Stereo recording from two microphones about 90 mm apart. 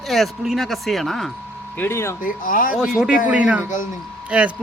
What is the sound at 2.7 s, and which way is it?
A man's voice, 5° right (ahead or behind).